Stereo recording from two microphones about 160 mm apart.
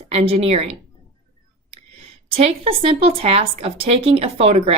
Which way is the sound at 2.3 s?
40° right (ahead or behind).